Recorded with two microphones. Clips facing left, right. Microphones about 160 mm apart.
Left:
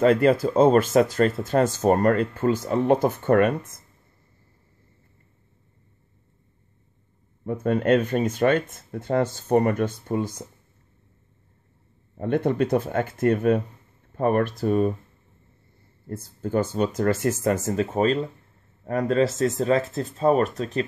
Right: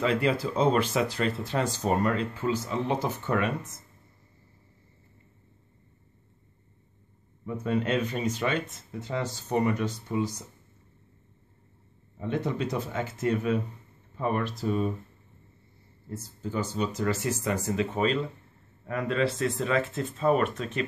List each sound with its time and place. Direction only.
0.0 s speech: 45° left (ahead or behind)
7.4 s speech: 50° left (ahead or behind)
12.2 s speech: 55° left (ahead or behind)
16.1 s speech: 55° left (ahead or behind); by 20.8 s 35° left (ahead or behind)